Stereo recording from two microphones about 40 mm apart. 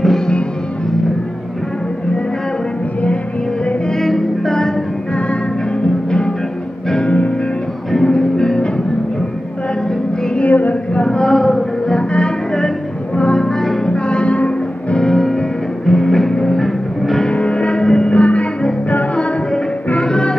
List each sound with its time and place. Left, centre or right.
3.9 s music: centre
6.0 s music: left
7.1 s music: left
7.9 s music: centre
10.4 s a sound: left
11.1 s a sound: centre
13.1 s music: left
13.5 s music: centre
13.8 s music: left
15.0 s music: centre
17.3 s music: left
18.1 s music: left
20.0 s music: left